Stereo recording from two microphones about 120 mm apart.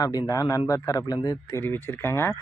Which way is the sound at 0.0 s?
30° left (ahead or behind).